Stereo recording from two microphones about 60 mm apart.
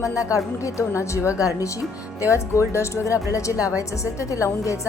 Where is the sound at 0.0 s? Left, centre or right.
Left.